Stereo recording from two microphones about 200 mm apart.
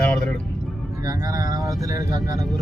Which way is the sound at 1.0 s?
20° right (ahead or behind).